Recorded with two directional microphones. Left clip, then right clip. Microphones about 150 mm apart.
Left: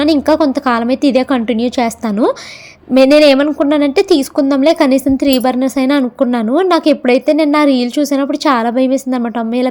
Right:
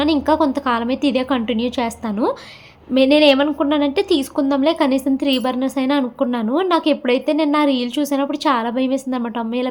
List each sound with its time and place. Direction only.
0.0 s a woman's voice: 40° left (ahead or behind)